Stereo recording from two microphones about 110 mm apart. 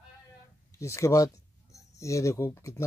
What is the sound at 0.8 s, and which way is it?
Speech, 30° left (ahead or behind).